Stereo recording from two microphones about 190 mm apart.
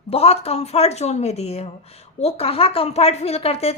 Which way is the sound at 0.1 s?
30° left (ahead or behind).